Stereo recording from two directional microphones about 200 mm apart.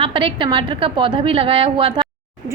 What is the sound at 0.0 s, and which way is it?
A woman's voice, 25° right (ahead or behind).